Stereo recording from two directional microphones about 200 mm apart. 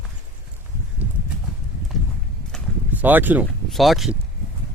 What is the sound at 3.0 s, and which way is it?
Speech, 10° right (ahead or behind).